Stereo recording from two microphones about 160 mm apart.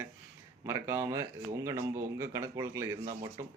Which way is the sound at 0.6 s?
15° right (ahead or behind).